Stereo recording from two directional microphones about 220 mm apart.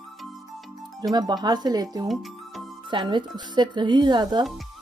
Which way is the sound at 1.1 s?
20° right (ahead or behind).